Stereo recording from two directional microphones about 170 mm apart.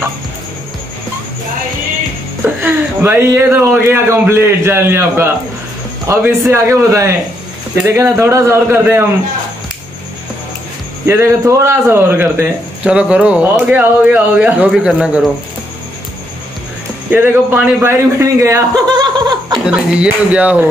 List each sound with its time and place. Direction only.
2.4 s a man's voice: 15° right (ahead or behind)
11.1 s a man's voice: 15° right (ahead or behind)
17.1 s speech: 10° right (ahead or behind)
19.6 s a man's voice: 5° right (ahead or behind)